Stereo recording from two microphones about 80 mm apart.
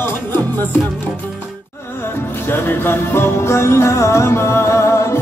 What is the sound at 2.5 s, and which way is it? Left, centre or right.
Music, left.